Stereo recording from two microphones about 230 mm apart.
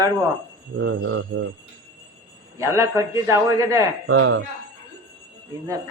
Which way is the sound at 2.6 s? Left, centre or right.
Centre.